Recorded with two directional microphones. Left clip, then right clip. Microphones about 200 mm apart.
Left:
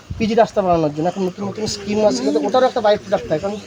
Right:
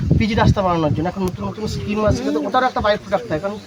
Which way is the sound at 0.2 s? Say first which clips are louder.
Left 4 dB; 30° right (ahead or behind).